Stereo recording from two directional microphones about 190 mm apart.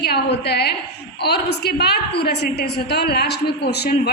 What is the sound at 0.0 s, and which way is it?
A woman's voice, 60° left (ahead or behind).